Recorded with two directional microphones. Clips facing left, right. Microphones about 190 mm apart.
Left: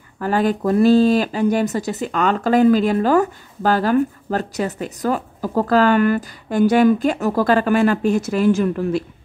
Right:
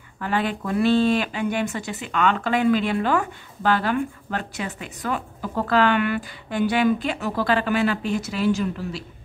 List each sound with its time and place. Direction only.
0.2 s speech: 40° left (ahead or behind)